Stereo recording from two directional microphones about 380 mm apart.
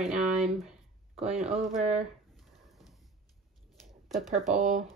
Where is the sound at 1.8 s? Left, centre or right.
Centre.